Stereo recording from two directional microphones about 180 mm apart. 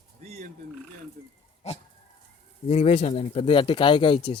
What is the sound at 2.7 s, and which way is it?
Speech, 35° left (ahead or behind).